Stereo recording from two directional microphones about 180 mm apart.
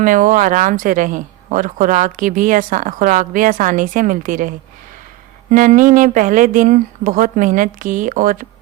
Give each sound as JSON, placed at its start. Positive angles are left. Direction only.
{"t": 0.0, "sound": "speech", "side_deg": -45}